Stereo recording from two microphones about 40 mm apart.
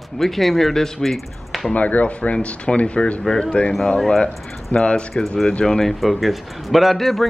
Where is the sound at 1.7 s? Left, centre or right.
Left.